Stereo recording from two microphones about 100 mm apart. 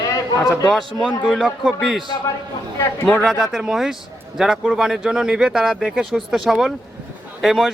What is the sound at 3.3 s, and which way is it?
Speech, 5° right (ahead or behind).